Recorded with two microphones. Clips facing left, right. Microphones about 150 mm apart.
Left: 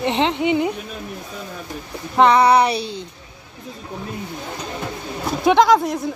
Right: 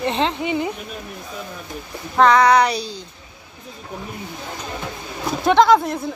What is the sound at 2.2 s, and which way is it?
Child singing, 30° left (ahead or behind).